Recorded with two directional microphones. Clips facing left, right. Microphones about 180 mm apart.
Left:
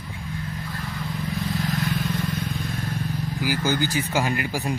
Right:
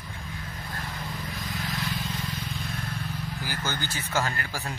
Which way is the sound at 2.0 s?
60° left (ahead or behind).